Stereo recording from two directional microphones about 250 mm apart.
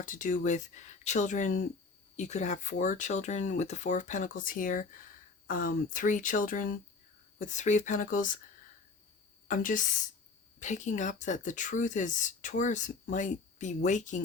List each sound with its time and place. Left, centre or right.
0.0 s speech: left
9.5 s speech: left